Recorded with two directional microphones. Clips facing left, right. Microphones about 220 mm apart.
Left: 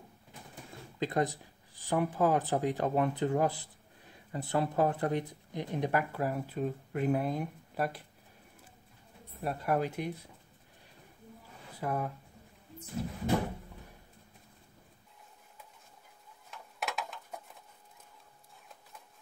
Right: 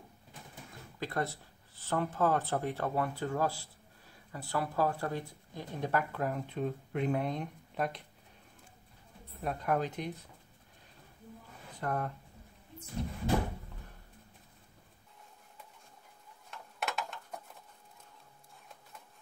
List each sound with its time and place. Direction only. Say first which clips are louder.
0.9 s speech: left 5 dB; 20° left (ahead or behind)
9.4 s speech: left 1 dB; 5° left (ahead or behind)
11.7 s speech: left 1 dB; 5° left (ahead or behind)
16.4 s a sound: even; centre (ahead or behind)